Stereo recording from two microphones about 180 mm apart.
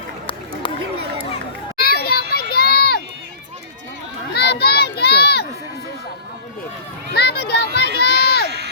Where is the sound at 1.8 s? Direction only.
60° left (ahead or behind).